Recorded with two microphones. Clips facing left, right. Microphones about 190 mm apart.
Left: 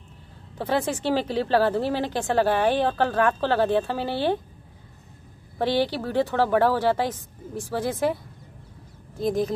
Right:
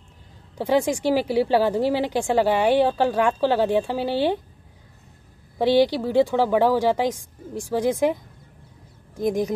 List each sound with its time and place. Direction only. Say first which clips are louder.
0.6 s speech: right 4 dB; 15° right (ahead or behind)
5.6 s speech: right 5 dB; 15° right (ahead or behind)
9.2 s speech: right 1 dB; 15° right (ahead or behind)